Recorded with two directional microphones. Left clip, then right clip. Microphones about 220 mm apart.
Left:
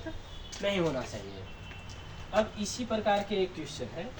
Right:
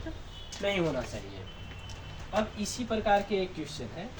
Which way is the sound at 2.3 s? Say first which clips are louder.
Left 2 dB; 10° right (ahead or behind).